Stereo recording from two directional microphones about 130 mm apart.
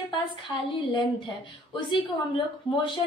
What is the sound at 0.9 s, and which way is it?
A woman's voice, 40° left (ahead or behind).